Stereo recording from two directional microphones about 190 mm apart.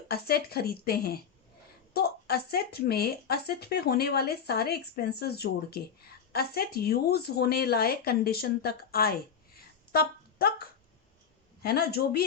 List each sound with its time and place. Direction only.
0.1 s speech: 55° left (ahead or behind)
9.9 s music: 55° left (ahead or behind)
11.6 s speech: 55° left (ahead or behind)